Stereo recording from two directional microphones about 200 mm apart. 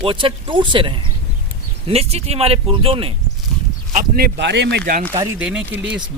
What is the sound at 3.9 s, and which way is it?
Speech, 45° right (ahead or behind).